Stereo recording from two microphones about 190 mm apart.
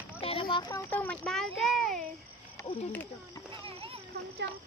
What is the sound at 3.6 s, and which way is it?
Children playing, 30° right (ahead or behind).